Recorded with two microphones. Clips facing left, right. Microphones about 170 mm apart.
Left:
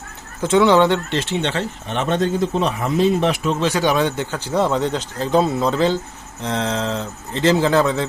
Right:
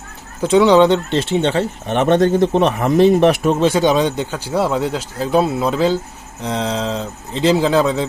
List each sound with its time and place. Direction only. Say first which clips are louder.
0.4 s speech: right 3 dB; 15° right (ahead or behind)
1.5 s speech: right 6 dB; 55° right (ahead or behind)
3.7 s speech: right 3 dB; 20° right (ahead or behind)